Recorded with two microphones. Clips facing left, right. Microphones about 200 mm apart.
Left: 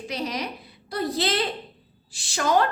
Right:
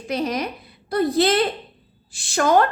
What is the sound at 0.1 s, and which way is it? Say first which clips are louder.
A woman's voice: right 7 dB; 50° right (ahead or behind).